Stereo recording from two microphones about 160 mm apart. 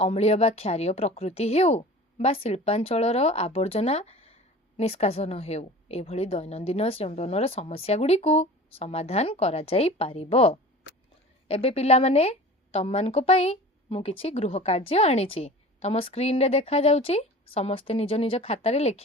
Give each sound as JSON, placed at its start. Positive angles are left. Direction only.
{"t": 0.0, "sound": "speech", "side_deg": 40}